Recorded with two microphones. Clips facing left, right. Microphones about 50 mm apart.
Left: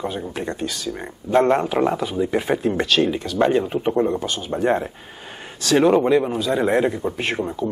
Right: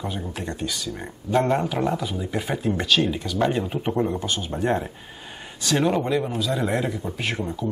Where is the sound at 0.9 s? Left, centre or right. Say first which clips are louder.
Left 5 dB; left.